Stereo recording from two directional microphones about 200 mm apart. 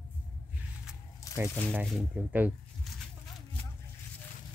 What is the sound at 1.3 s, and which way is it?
Squish, 15° left (ahead or behind).